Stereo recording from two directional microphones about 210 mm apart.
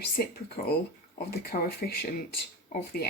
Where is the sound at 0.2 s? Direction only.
45° left (ahead or behind).